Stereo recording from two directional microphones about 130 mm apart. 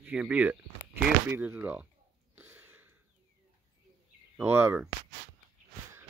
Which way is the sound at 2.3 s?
15° right (ahead or behind).